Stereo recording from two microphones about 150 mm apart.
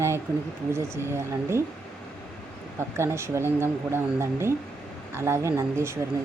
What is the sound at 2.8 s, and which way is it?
Speech, 15° right (ahead or behind).